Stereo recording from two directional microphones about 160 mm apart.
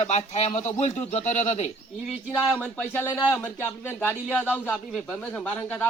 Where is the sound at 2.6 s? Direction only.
10° left (ahead or behind).